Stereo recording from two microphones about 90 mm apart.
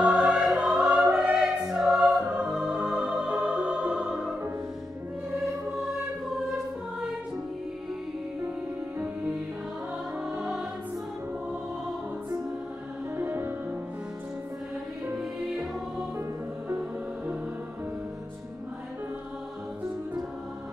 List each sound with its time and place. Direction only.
0.0 s music: 10° right (ahead or behind)
8.9 s music: 20° right (ahead or behind)
10.4 s music: 5° right (ahead or behind)
13.1 s music: 25° right (ahead or behind)